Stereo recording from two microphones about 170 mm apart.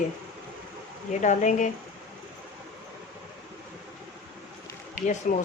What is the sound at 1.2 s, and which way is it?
Speech, 45° left (ahead or behind).